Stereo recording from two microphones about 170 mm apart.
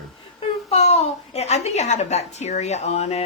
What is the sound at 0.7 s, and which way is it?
A woman's voice, 35° left (ahead or behind).